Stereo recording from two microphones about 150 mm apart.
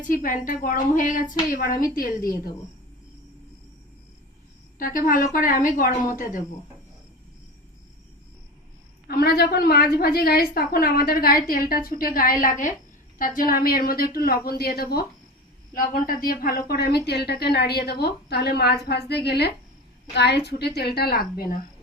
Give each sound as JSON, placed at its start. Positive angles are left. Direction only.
{"t": 0.1, "sound": "a woman's voice", "side_deg": 65}
{"t": 4.8, "sound": "a woman's voice", "side_deg": 70}
{"t": 9.0, "sound": "a woman's voice", "side_deg": 90}
{"t": 15.7, "sound": "a woman's voice", "side_deg": 70}